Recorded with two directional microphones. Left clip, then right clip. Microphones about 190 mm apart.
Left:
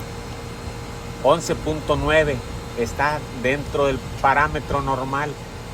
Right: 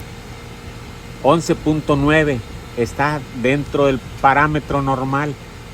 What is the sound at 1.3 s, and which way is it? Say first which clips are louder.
Speech: right 4 dB; 65° right (ahead or behind).